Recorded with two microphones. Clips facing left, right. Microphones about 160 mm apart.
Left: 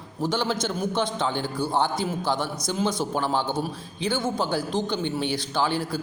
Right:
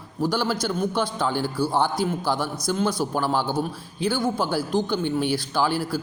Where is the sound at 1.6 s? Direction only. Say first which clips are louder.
Right 2 dB; 20° left (ahead or behind).